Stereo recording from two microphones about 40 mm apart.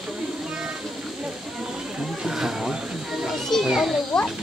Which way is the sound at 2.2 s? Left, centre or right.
Centre.